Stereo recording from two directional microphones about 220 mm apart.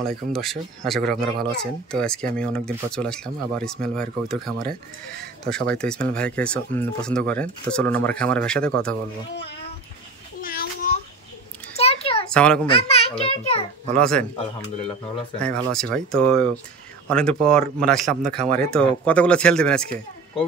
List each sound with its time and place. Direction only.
0.3 s speech: centre (ahead or behind)
10.4 s a sound: 40° left (ahead or behind)
11.7 s a sound: 25° left (ahead or behind)
12.3 s a child's voice: 5° left (ahead or behind)
12.6 s a child's voice: 25° left (ahead or behind)
13.9 s speech: 5° left (ahead or behind)
15.4 s speech: 5° left (ahead or behind)